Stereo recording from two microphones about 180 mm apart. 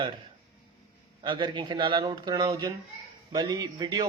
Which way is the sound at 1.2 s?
25° right (ahead or behind).